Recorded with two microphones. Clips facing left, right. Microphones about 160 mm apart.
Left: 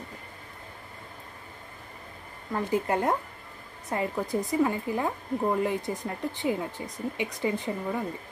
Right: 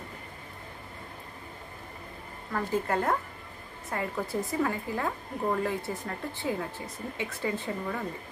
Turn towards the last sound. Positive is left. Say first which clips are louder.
# left 2 dB
turn(degrees=15)  # may be behind; listen again after turning